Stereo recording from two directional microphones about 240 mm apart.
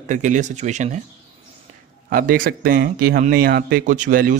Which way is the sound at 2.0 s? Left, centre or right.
Right.